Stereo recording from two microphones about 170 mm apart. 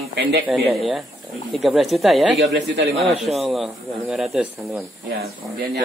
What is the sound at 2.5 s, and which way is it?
Speech, 80° right.